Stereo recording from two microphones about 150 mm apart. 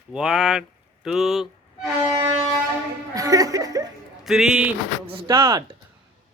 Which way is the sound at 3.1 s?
25° right (ahead or behind).